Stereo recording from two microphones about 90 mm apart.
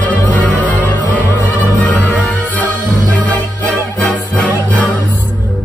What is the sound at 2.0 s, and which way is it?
Music, 15° left (ahead or behind).